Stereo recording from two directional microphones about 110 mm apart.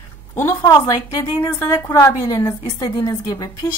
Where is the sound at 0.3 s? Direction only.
20° left (ahead or behind).